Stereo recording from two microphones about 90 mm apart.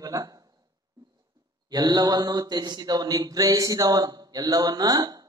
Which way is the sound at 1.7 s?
45° right (ahead or behind).